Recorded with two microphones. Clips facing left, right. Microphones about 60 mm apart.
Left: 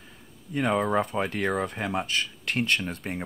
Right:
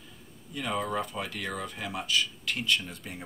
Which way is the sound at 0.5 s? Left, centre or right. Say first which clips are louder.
Left 7 dB; left.